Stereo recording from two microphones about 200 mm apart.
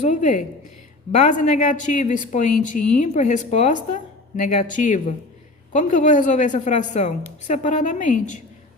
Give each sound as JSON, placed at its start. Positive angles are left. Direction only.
{"t": 0.0, "sound": "a woman's voice", "side_deg": 40}